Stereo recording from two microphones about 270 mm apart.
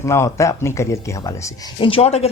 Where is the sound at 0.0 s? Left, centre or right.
Centre.